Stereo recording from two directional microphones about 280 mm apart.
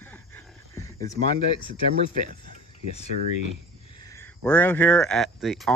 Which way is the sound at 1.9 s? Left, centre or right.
Right.